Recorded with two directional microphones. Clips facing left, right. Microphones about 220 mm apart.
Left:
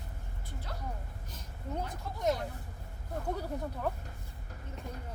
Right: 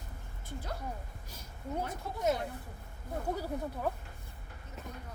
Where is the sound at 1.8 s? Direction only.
5° right (ahead or behind).